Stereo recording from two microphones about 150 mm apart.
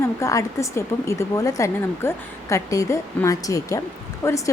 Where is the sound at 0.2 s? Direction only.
20° left (ahead or behind).